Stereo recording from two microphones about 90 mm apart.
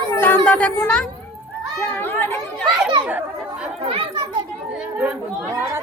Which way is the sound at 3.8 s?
80° right.